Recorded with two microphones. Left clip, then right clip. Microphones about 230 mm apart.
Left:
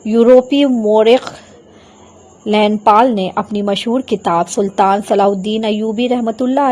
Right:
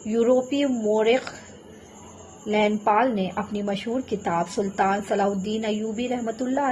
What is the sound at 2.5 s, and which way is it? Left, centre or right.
Speech, left.